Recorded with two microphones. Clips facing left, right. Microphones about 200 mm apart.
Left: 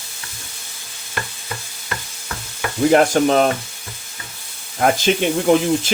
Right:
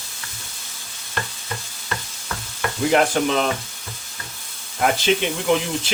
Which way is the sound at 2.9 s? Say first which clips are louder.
Left 4 dB; 45° left (ahead or behind).